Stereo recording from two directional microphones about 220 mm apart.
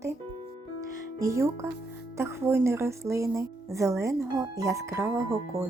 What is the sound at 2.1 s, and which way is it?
Speech, 10° right (ahead or behind).